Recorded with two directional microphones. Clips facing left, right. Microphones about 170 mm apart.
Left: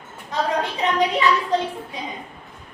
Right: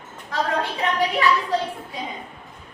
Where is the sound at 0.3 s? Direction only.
20° left (ahead or behind).